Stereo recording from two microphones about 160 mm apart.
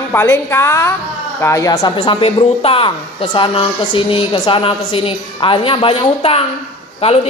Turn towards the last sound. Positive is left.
turn(degrees=35)  # may be behind; listen again after turning